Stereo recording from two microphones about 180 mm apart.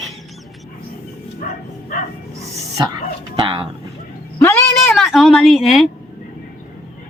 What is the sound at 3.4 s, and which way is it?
Bow-wow, 25° right (ahead or behind).